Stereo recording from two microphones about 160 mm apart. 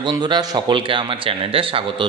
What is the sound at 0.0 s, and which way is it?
Speech, 25° right (ahead or behind).